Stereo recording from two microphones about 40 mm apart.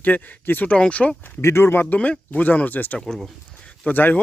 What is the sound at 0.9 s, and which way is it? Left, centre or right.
Speech, left.